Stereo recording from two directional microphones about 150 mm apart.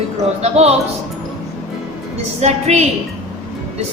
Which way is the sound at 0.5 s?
45° right (ahead or behind).